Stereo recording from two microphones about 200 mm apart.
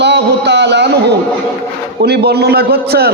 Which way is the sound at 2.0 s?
55° right (ahead or behind).